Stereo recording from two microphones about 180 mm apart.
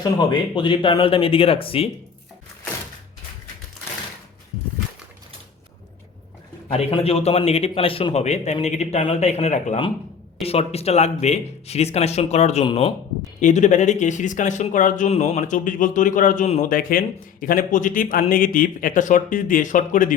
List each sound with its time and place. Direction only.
0.0 s speech: 25° left (ahead or behind)
6.7 s speech: 35° left (ahead or behind)